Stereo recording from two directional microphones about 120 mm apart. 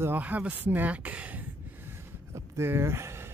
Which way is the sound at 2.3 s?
20° right (ahead or behind).